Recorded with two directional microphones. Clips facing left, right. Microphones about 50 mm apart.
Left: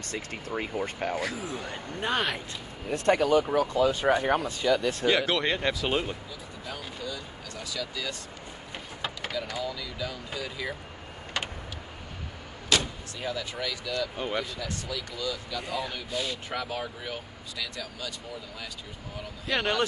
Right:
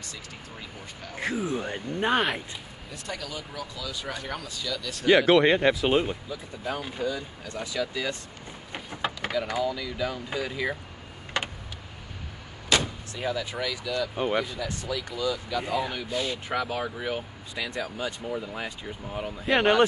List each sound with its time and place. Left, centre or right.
0.1 s speech: left
1.1 s speech: right
2.9 s speech: left
5.1 s speech: right
12.6 s speech: centre
14.1 s speech: centre
17.6 s speech: right